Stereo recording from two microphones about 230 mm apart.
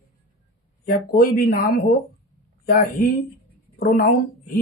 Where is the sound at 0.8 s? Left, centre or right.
Left.